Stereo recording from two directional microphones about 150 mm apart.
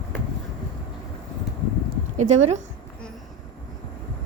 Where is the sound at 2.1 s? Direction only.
50° right (ahead or behind).